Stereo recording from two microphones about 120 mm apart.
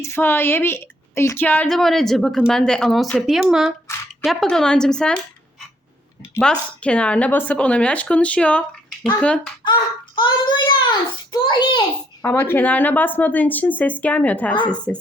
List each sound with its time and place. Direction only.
0.0 s a woman's voice: 20° left (ahead or behind)
6.4 s a woman's voice: 10° left (ahead or behind)
10.2 s child singing: 40° left (ahead or behind)
12.2 s a woman's voice: 20° left (ahead or behind)